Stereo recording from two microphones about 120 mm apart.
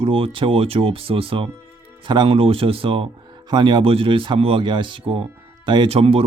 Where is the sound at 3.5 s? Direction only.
40° right (ahead or behind).